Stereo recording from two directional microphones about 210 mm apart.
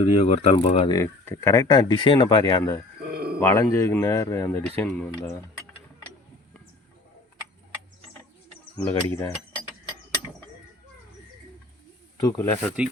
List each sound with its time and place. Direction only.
0.0 s speech: 30° left (ahead or behind)
0.9 s speech: 10° left (ahead or behind)
3.0 s a sound: 45° right (ahead or behind)
3.4 s speech: 15° left (ahead or behind)
8.7 s speech: 5° left (ahead or behind)
12.2 s speech: 15° left (ahead or behind)